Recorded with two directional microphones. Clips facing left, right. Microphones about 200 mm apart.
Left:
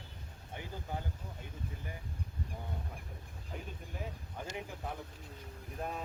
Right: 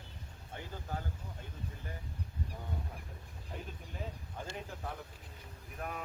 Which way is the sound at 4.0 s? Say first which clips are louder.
Even; 15° left (ahead or behind).